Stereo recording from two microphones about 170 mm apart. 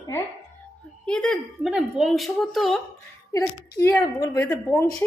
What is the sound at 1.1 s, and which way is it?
Speech, 5° left (ahead or behind).